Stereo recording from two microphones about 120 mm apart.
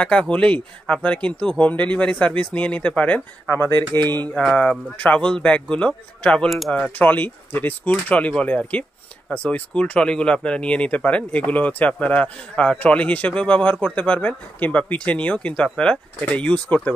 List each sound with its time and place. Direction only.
0.0 s speech: 10° left (ahead or behind)
4.3 s speech: 5° left (ahead or behind)